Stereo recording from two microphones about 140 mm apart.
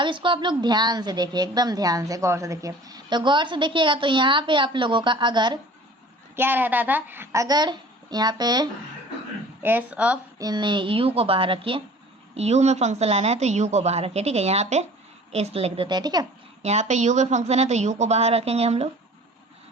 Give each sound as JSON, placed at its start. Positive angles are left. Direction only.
{"t": 0.0, "sound": "a woman's voice", "side_deg": -35}
{"t": 6.3, "sound": "a woman's voice", "side_deg": -15}
{"t": 7.4, "sound": "speech", "side_deg": -30}
{"t": 9.6, "sound": "a woman's voice", "side_deg": -10}
{"t": 10.3, "sound": "a woman's voice", "side_deg": -30}
{"t": 15.9, "sound": "a woman's voice", "side_deg": -30}
{"t": 16.6, "sound": "a woman's voice", "side_deg": -55}